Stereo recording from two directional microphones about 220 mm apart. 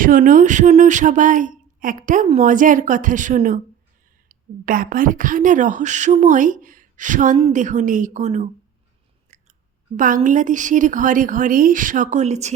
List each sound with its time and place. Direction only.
0.0 s speech: 40° right (ahead or behind)
9.3 s chewing: 35° right (ahead or behind)
10.0 s speech: 35° right (ahead or behind)